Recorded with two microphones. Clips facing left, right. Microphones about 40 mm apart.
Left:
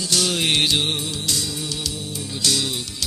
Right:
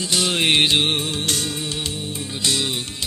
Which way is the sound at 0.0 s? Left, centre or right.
Right.